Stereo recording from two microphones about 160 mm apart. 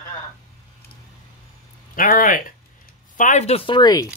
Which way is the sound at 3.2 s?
45° left (ahead or behind).